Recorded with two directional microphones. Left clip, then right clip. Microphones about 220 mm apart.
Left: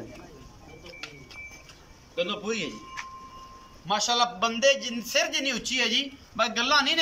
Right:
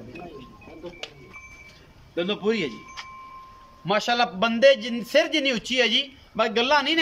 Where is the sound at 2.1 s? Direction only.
35° right (ahead or behind).